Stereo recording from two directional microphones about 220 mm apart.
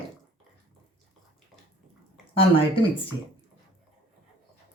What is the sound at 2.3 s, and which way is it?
Speech, 25° left (ahead or behind).